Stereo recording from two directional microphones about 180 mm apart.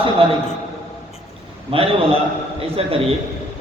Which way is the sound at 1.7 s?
30° right (ahead or behind).